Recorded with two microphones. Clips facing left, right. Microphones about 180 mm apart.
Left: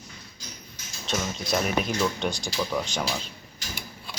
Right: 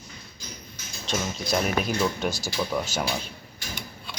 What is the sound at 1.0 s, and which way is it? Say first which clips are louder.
Speech: even; centre (ahead or behind).